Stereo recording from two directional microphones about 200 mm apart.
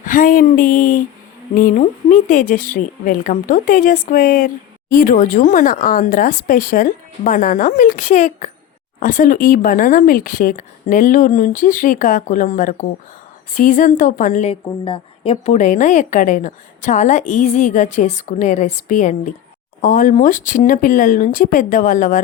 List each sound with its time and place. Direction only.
0.0 s a sound: 45° left (ahead or behind)
1.5 s a woman's voice: 40° left (ahead or behind)
14.6 s a woman's voice: 25° left (ahead or behind)